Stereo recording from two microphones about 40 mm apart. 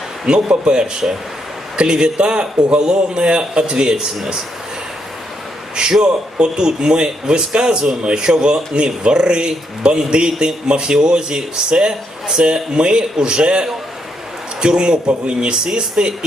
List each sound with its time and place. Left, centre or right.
0.3 s a man's voice: right
5.7 s a man's voice: right